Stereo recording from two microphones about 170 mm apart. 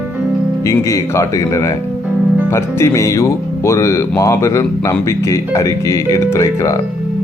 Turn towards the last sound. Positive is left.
turn(degrees=20)  # may be behind; listen again after turning